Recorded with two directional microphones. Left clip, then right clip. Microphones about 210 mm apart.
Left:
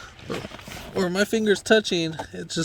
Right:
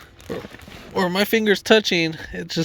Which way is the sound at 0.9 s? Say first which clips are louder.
Right 4 dB; 15° right (ahead or behind).